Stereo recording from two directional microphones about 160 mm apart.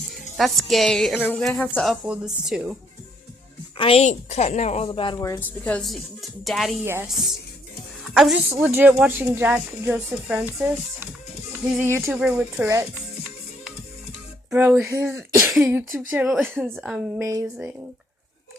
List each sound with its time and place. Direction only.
0.1 s a woman's voice: centre (ahead or behind)
3.8 s a woman's voice: 35° left (ahead or behind)
4.9 s speech: 30° left (ahead or behind)
5.4 s a woman's voice: 10° left (ahead or behind)
6.8 s speech: 15° right (ahead or behind)
8.1 s a woman's voice: centre (ahead or behind)
14.5 s speech: 10° right (ahead or behind)
15.4 s a woman's voice: 5° right (ahead or behind)
17.2 s speech: 20° right (ahead or behind)